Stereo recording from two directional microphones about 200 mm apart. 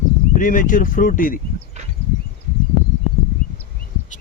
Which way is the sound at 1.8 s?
35° right (ahead or behind).